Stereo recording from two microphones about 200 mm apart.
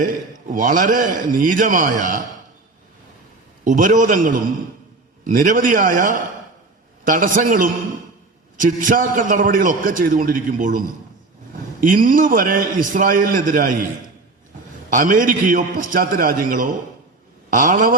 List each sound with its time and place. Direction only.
0.5 s a man's voice: 40° right (ahead or behind)
3.6 s a man's voice: 40° right (ahead or behind)
14.8 s a man's voice: 40° right (ahead or behind)